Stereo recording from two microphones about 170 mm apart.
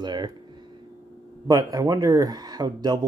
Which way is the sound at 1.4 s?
20° right (ahead or behind).